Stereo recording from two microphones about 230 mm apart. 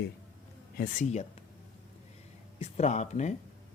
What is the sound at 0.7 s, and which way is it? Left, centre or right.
Speech, left.